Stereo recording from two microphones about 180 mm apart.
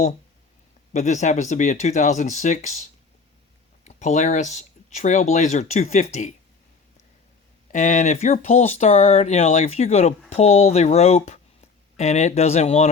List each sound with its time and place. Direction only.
0.9 s speech: 40° left (ahead or behind)
3.8 s speech: 40° left (ahead or behind)
7.7 s speech: 40° left (ahead or behind)